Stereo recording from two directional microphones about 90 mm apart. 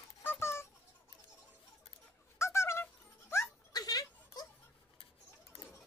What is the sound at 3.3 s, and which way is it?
Music, 25° left (ahead or behind).